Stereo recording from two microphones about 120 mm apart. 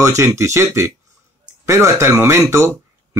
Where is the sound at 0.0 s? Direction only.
25° right (ahead or behind).